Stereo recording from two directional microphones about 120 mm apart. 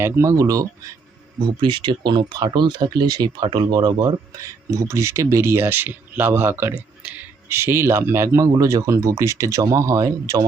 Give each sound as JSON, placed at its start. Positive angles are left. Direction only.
{"t": 0.0, "sound": "speech", "side_deg": -25}
{"t": 1.5, "sound": "speech", "side_deg": -40}